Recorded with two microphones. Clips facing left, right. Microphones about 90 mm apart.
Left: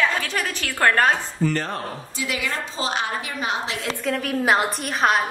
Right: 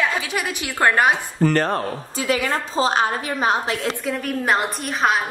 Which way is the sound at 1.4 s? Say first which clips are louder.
Right 6 dB; 55° right (ahead or behind).